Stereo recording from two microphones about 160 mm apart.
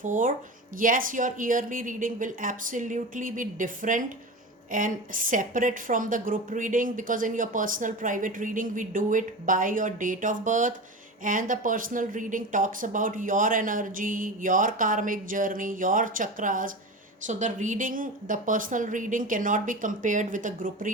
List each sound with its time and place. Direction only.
0.0 s a woman's voice: 55° right (ahead or behind)